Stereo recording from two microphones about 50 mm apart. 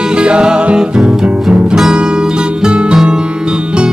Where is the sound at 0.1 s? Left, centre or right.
Centre.